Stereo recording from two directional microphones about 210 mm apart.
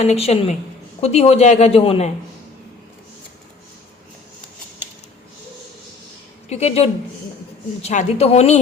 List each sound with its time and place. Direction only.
0.0 s a man's voice: 30° left (ahead or behind)
6.5 s a man's voice: 30° left (ahead or behind)